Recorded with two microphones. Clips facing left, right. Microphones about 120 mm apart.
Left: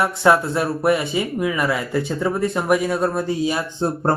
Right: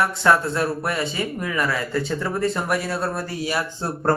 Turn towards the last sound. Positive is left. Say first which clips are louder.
# left 2 dB
turn(degrees=20)  # may be behind; listen again after turning